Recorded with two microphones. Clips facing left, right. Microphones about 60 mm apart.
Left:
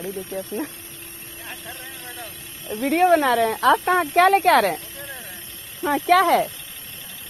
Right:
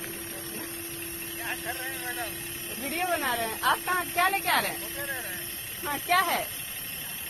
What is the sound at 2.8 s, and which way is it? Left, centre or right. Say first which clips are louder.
Speech: left 12 dB; left.